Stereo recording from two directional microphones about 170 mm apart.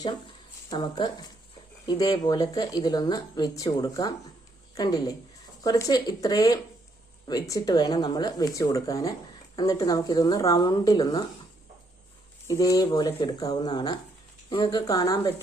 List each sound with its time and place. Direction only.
0.0 s a woman's voice: 25° left (ahead or behind)
12.5 s speech: 20° left (ahead or behind)